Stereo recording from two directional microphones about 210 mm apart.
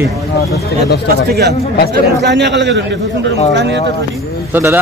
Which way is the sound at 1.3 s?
50° right (ahead or behind).